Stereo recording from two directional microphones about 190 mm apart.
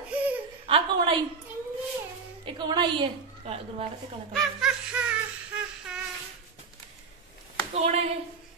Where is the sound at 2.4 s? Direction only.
25° right (ahead or behind).